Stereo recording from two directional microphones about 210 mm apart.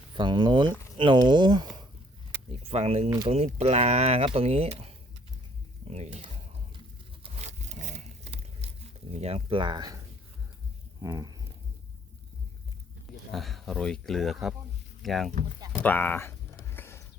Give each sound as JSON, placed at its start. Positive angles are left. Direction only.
{"t": 0.1, "sound": "speech", "side_deg": -20}
{"t": 3.1, "sound": "speech", "side_deg": -20}
{"t": 3.3, "sound": "speech", "side_deg": -30}
{"t": 6.7, "sound": "a sound", "side_deg": -30}
{"t": 9.1, "sound": "speech", "side_deg": -30}
{"t": 11.0, "sound": "livestock", "side_deg": -15}
{"t": 13.3, "sound": "speech", "side_deg": 0}
{"t": 16.6, "sound": "a sound", "side_deg": 10}